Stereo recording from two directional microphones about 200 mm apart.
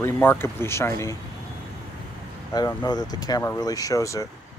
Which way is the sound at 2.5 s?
20° left (ahead or behind).